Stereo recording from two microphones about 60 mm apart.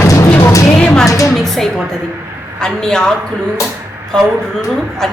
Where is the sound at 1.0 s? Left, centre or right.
Left.